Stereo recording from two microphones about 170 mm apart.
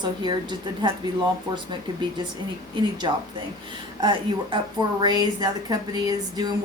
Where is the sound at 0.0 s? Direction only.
25° right (ahead or behind).